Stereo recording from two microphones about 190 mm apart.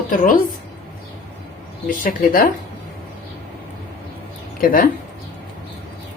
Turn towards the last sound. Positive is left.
turn(degrees=50)  # may be behind; listen again after turning